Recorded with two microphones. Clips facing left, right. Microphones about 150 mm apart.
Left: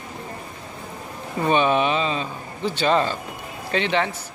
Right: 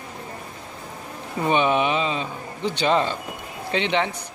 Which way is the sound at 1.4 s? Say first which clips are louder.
Left 1 dB; 15° right (ahead or behind).